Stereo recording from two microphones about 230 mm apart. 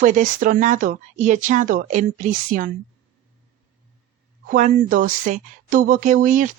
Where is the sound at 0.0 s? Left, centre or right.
Right.